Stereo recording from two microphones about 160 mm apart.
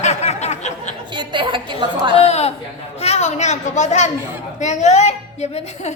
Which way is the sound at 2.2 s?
40° left (ahead or behind).